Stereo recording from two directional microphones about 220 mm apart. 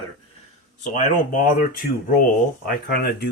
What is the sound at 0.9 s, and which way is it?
Speech, 35° left (ahead or behind).